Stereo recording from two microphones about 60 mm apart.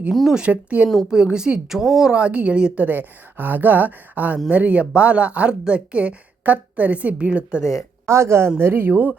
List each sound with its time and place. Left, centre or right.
0.1 s speech: centre
0.3 s a woman's voice: right
8.0 s speech: right
8.5 s speech: right